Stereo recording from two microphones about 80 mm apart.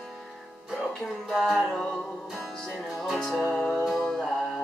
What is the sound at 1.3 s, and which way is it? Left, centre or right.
Music, centre.